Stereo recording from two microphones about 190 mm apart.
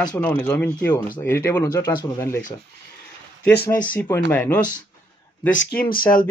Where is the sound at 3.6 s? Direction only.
10° left (ahead or behind).